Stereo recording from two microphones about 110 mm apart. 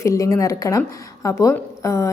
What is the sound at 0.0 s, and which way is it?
A woman's voice, 30° left (ahead or behind).